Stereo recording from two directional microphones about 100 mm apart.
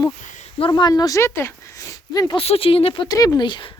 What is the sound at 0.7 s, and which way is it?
Speech, 45° left (ahead or behind).